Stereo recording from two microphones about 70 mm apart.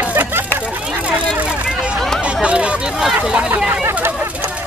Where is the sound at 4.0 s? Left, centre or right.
Right.